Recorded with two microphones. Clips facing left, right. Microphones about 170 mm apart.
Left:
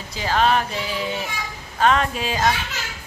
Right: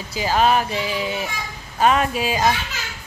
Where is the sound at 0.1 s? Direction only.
5° right (ahead or behind).